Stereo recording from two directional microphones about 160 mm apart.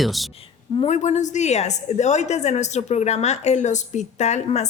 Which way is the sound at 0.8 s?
45° left (ahead or behind).